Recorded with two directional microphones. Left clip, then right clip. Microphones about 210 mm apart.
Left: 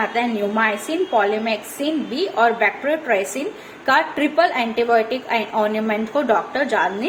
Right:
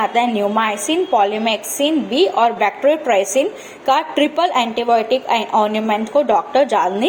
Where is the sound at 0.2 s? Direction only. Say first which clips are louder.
Right 3 dB; 30° right (ahead or behind).